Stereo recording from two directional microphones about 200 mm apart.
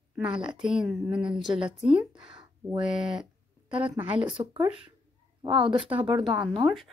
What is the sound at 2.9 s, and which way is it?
Speech, 5° right (ahead or behind).